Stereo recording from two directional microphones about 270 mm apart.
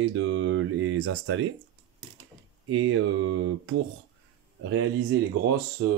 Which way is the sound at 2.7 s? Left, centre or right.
Right.